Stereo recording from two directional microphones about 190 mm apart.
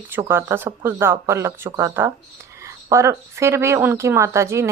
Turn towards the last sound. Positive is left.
turn(degrees=-15)  # may be behind; listen again after turning